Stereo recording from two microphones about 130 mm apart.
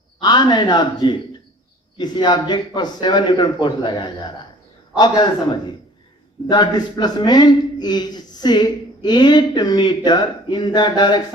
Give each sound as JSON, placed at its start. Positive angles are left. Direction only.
{"t": 0.2, "sound": "a man's voice", "side_deg": 35}